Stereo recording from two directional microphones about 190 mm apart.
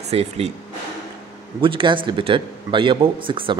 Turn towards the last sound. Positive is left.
turn(degrees=-25)  # may be behind; listen again after turning